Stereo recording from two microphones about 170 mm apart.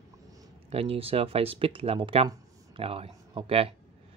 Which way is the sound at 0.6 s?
35° right (ahead or behind).